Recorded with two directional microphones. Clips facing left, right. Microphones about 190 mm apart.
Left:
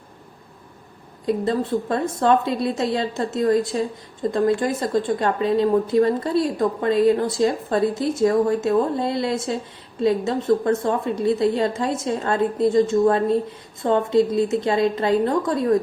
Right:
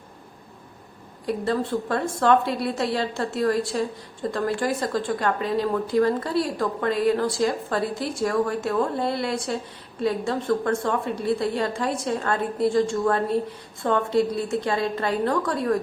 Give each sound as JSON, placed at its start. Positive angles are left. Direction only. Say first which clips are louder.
{"t": 1.3, "sound": "a woman's voice", "louder": "left 3 dB", "side_deg": 20}